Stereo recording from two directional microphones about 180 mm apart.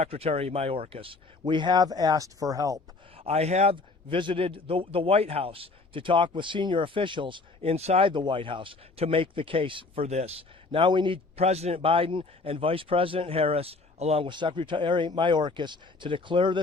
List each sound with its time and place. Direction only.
0.0 s a man's voice: 35° right (ahead or behind); by 2.8 s 20° right (ahead or behind)
3.2 s a man's voice: 35° right (ahead or behind)